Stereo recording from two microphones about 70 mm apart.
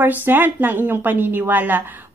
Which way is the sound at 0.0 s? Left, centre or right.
Right.